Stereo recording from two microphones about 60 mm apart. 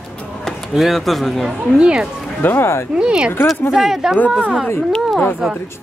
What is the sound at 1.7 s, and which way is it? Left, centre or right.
Speech, centre.